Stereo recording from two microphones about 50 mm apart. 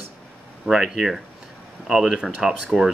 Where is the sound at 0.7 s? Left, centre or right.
Centre.